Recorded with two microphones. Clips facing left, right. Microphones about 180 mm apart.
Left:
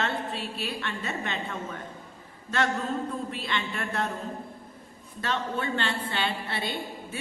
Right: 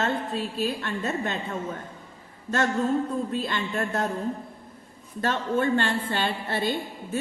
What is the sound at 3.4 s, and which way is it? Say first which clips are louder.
Speech: right 4 dB; 45° right (ahead or behind).